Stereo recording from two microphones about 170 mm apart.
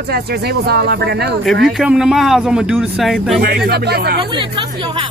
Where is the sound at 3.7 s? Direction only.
70° right (ahead or behind).